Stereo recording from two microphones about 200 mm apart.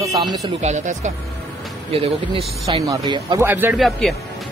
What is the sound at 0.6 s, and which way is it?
Speech, 35° right (ahead or behind).